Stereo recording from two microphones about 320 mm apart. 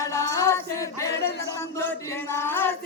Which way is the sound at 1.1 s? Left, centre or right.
Left.